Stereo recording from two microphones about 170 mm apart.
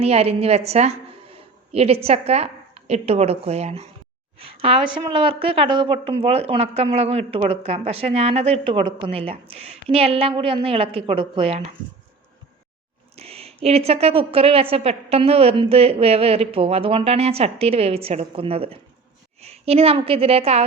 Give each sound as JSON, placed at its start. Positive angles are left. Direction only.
{"t": 0.0, "sound": "a woman's voice", "side_deg": -35}
{"t": 13.1, "sound": "a woman's voice", "side_deg": -35}